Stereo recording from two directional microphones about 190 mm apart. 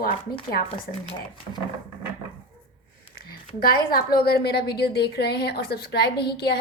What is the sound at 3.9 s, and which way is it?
A woman's voice, 50° left (ahead or behind).